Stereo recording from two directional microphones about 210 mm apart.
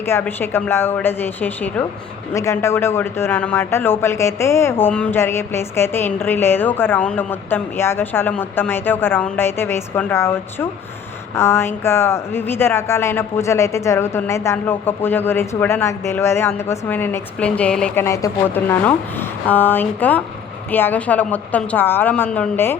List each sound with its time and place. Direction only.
0.0 s speech: 10° left (ahead or behind)